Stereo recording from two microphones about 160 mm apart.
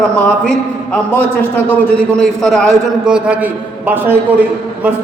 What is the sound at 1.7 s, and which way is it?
A man's voice, 5° left (ahead or behind).